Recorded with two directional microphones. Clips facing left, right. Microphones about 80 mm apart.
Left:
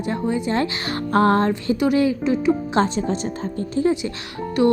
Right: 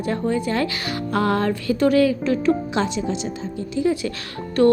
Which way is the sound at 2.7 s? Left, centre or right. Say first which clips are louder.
Left 3 dB; left.